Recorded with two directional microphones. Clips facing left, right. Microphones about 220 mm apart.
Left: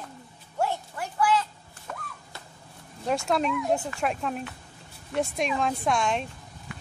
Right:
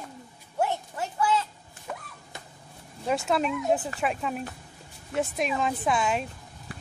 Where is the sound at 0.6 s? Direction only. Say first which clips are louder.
Right 1 dB; 20° right (ahead or behind).